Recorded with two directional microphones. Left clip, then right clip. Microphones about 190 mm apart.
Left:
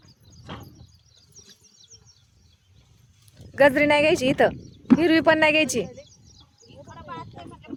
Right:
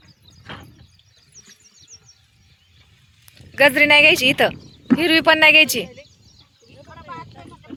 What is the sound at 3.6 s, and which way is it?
A woman's voice, 25° left (ahead or behind).